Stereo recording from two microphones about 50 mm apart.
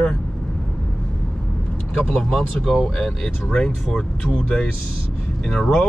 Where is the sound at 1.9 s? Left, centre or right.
Centre.